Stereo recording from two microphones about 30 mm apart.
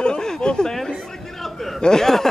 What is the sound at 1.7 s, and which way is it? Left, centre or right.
Speech, centre.